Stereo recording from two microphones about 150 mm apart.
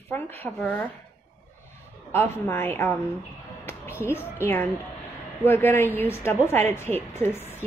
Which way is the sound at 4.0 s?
15° left (ahead or behind).